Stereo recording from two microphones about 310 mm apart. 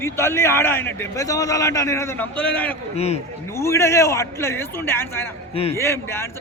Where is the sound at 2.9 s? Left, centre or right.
Centre.